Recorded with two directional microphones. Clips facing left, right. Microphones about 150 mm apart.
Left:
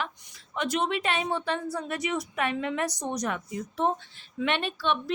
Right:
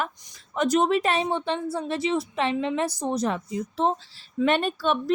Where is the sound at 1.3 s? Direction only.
25° right (ahead or behind).